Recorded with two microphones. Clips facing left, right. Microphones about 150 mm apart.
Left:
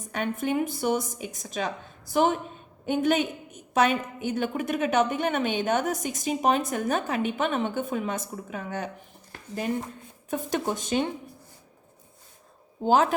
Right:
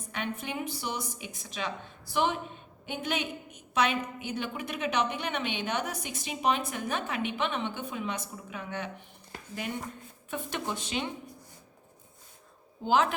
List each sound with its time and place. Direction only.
0.1 s a woman's voice: 45° left (ahead or behind)
10.2 s a woman's voice: 40° left (ahead or behind)
12.8 s a woman's voice: 40° left (ahead or behind)